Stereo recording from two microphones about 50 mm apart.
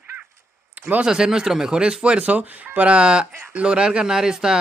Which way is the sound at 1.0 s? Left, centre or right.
Centre.